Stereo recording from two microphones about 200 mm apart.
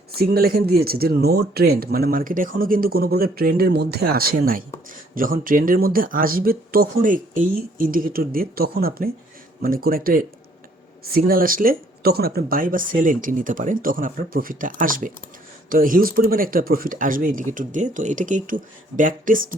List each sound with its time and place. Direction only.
0.1 s speech: 50° right (ahead or behind)